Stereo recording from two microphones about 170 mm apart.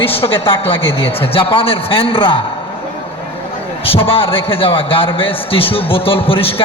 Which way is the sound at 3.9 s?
30° left (ahead or behind).